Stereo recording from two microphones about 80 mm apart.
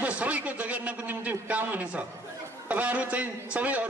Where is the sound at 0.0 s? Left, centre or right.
Centre.